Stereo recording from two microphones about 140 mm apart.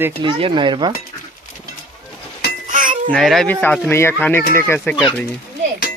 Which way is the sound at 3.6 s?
15° left (ahead or behind).